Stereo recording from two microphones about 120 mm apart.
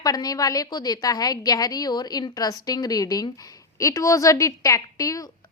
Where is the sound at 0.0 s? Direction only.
30° left (ahead or behind).